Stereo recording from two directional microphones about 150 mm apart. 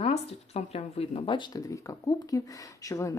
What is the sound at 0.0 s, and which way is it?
Speech, 45° left (ahead or behind).